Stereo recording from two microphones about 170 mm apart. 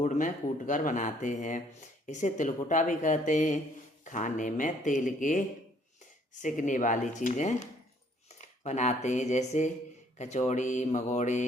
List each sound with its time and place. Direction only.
0.0 s speech: 45° left (ahead or behind)
6.4 s speech: 50° left (ahead or behind)